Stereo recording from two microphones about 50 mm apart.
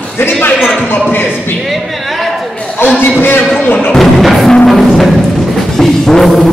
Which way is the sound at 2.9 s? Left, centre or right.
Left.